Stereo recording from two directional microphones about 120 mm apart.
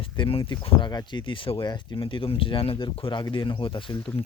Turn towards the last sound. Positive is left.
turn(degrees=45)  # may be behind; listen again after turning